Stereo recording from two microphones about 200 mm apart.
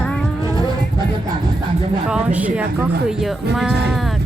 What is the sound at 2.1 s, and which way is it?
Speech, 5° right (ahead or behind).